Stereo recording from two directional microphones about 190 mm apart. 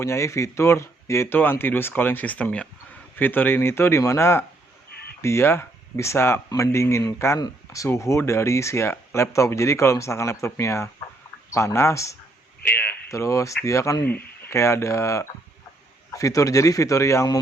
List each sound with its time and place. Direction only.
0.0 s speech: 15° left (ahead or behind)